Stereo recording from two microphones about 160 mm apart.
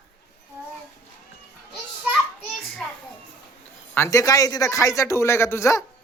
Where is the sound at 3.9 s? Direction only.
15° left (ahead or behind).